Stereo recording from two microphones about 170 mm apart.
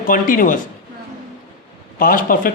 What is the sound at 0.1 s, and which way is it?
Speech, 55° left (ahead or behind).